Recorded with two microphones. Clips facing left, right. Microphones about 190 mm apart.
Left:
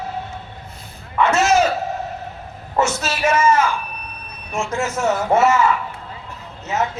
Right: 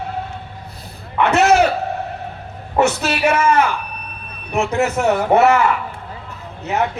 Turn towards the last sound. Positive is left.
turn(degrees=-60)  # may be behind; listen again after turning